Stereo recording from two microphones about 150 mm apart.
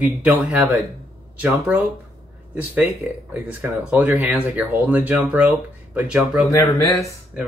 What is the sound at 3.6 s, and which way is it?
Speech, 10° right (ahead or behind).